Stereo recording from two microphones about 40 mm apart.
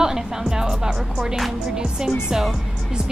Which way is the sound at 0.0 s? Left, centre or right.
Centre.